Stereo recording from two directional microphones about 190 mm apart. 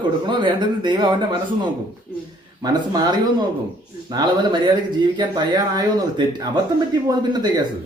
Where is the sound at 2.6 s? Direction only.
20° right (ahead or behind).